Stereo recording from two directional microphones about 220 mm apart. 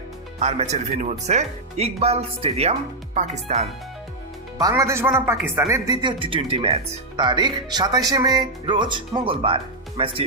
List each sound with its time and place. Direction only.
0.3 s speech: 30° right (ahead or behind)
4.5 s speech: 15° right (ahead or behind)